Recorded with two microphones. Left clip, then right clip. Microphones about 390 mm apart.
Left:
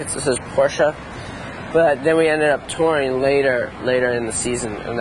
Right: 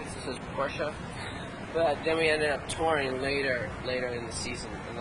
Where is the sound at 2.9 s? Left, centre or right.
Left.